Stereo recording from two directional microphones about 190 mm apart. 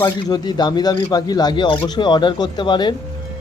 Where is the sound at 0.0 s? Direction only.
20° left (ahead or behind).